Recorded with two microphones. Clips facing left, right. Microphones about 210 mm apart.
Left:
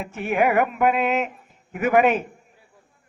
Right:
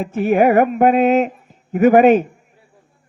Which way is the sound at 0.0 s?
35° right (ahead or behind).